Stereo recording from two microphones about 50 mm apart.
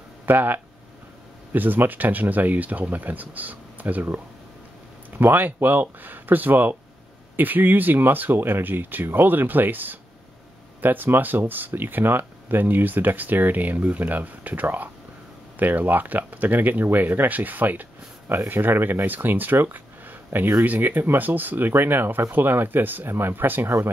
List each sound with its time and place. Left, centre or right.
0.3 s speech: right
5.2 s speech: right